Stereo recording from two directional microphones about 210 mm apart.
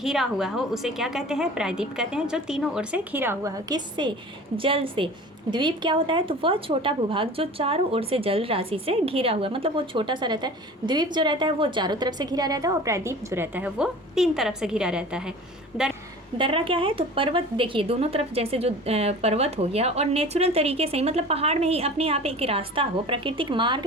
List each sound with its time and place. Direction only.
0.0 s a woman's voice: centre (ahead or behind)
16.4 s a woman's voice: 25° right (ahead or behind)